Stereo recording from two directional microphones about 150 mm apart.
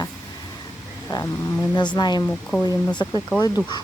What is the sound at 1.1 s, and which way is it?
Speech, 25° left (ahead or behind).